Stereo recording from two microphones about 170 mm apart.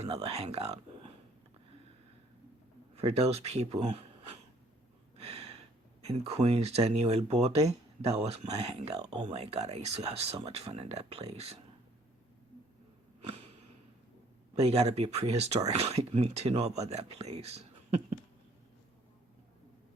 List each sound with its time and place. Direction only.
0.0 s speech: 35° right (ahead or behind)
2.9 s a man's voice: 35° right (ahead or behind)
5.1 s a sound: 35° right (ahead or behind)
6.1 s speech: 40° right (ahead or behind)
13.2 s a sound: 35° right (ahead or behind)
14.5 s speech: 40° right (ahead or behind)